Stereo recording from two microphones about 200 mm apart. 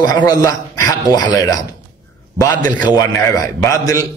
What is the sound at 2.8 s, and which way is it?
A man's voice, 20° left (ahead or behind).